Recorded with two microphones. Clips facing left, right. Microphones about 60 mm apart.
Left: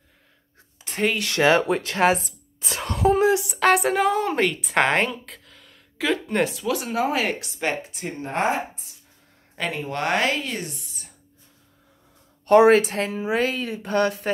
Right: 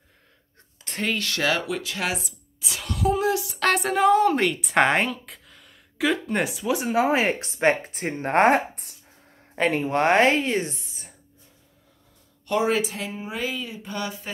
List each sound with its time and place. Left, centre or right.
0.8 s speech: centre
1.3 s speech: left
1.6 s a sound: left
3.5 s a woman's voice: centre; by 8.9 s right
9.6 s speech: right
12.4 s speech: left